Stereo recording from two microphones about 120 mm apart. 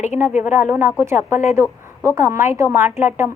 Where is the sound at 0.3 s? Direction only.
15° right (ahead or behind).